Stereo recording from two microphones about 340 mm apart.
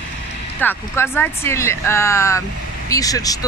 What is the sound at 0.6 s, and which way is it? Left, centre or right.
Speech, centre.